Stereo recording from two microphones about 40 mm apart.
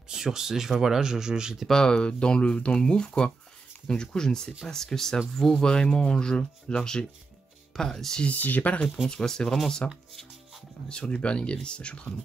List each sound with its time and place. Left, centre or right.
0.1 s speech: centre
1.7 s speech: centre
8.3 s speech: left
9.1 s speech: centre
10.9 s speech: left